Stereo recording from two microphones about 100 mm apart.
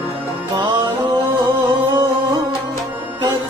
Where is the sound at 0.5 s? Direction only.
50° right (ahead or behind).